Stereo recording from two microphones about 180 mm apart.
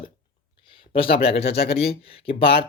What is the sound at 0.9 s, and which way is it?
Speech, 30° left (ahead or behind).